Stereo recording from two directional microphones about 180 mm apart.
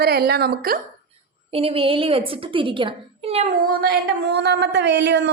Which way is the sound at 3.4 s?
55° right (ahead or behind).